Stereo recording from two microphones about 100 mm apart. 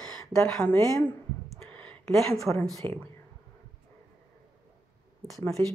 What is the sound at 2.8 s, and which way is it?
Speech, 55° right (ahead or behind).